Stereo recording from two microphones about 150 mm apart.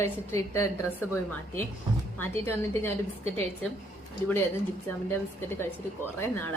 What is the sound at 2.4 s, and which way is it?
Speech, 15° left (ahead or behind).